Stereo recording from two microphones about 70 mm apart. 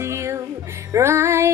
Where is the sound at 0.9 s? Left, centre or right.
Right.